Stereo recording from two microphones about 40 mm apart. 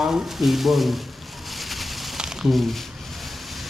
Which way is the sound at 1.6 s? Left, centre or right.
Centre.